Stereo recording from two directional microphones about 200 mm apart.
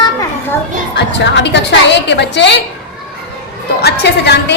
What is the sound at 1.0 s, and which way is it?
A woman's voice, 60° left (ahead or behind).